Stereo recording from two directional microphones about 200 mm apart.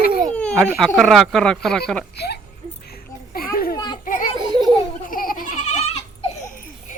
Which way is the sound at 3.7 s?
20° left (ahead or behind).